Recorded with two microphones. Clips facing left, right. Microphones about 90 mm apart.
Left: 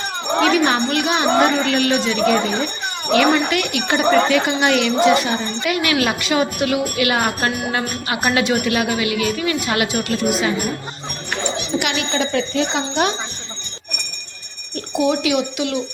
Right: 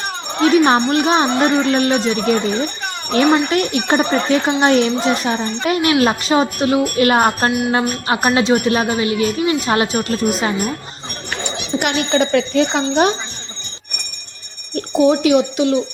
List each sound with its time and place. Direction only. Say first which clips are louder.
0.5 s a woman's voice: right 4 dB; 35° right (ahead or behind)
11.8 s speech: right 7 dB; 45° right (ahead or behind)
14.9 s a woman's voice: right 5 dB; 40° right (ahead or behind)